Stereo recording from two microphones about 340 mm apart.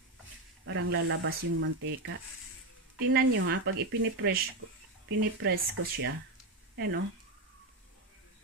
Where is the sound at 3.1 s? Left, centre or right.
Right.